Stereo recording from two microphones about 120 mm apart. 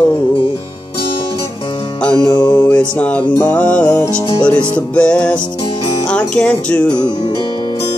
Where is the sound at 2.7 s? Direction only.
10° left (ahead or behind).